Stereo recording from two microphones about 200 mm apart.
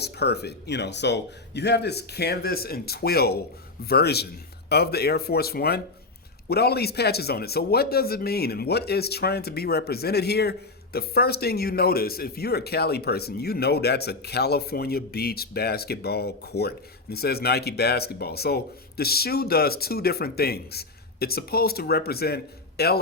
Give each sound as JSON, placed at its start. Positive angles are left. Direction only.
{"t": 0.0, "sound": "a man's voice", "side_deg": 55}